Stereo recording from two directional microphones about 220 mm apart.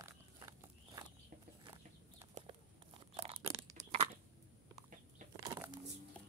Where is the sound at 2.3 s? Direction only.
25° right (ahead or behind).